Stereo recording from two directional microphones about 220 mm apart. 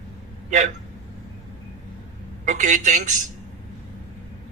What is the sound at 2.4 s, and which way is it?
Speech, 35° right (ahead or behind).